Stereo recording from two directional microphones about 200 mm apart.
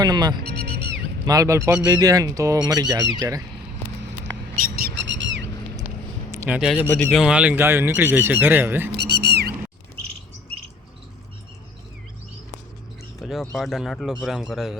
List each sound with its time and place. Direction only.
0.0 s speech: 20° right (ahead or behind)
4.5 s bird: 45° right (ahead or behind); by 5.4 s 65° right (ahead or behind)
6.3 s speech: 10° right (ahead or behind)
9.0 s a sound: 55° right (ahead or behind)
13.1 s bird: centre (ahead or behind)
13.6 s speech: centre (ahead or behind)